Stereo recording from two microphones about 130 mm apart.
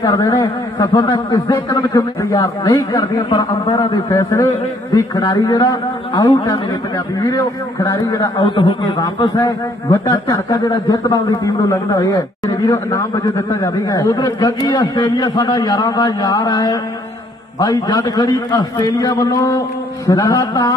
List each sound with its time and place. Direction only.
0.0 s a man's voice: 35° left (ahead or behind)
3.0 s a man's voice: 35° left (ahead or behind)
4.9 s a man's voice: 30° left (ahead or behind)